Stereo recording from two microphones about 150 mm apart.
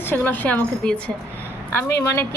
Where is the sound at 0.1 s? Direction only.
10° left (ahead or behind).